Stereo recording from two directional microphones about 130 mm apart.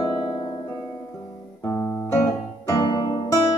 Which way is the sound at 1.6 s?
20° left (ahead or behind).